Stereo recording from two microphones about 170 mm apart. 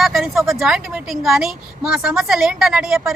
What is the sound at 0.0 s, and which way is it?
A woman's voice, centre (ahead or behind).